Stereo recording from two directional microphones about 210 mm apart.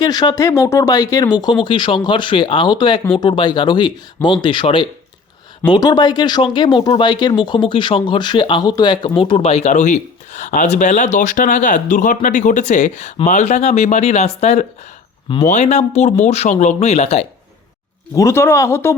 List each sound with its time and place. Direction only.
0.0 s speech: 20° left (ahead or behind)
18.1 s speech: 15° left (ahead or behind)